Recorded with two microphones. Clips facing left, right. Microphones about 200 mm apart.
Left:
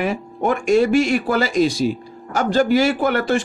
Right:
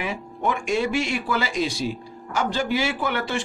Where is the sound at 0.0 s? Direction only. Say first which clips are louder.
Left 6 dB; 45° left (ahead or behind).